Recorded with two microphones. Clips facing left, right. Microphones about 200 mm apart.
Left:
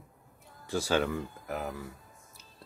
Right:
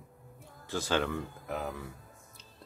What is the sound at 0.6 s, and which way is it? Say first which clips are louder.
Speech: left 2 dB; 10° left (ahead or behind).